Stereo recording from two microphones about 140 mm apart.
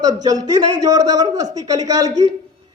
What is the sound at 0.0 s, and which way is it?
A man's voice, 25° right (ahead or behind).